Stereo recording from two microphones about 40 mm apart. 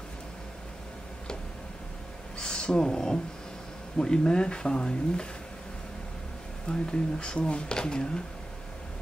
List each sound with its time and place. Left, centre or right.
2.3 s a sound: left
4.0 s speech: centre
6.7 s speech: left